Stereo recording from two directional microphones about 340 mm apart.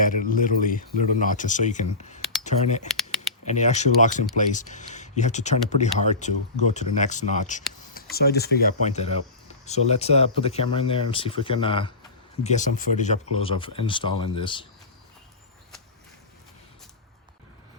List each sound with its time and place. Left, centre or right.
0.0 s speech: left
2.9 s a sound: centre
3.4 s speech: centre